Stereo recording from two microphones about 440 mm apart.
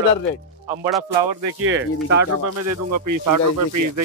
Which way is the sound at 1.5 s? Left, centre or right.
Right.